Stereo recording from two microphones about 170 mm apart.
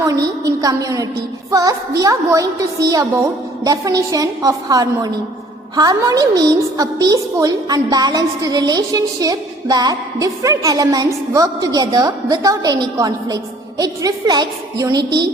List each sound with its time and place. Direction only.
0.0 s a woman's voice: 20° right (ahead or behind)